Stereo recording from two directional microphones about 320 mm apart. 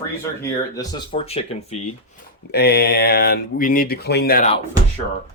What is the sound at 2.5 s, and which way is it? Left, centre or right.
Speech, left.